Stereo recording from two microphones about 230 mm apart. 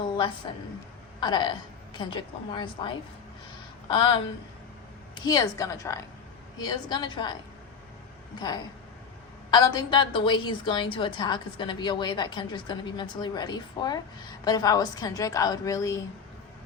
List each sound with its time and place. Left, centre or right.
0.5 s a woman's voice: left
8.4 s a woman's voice: centre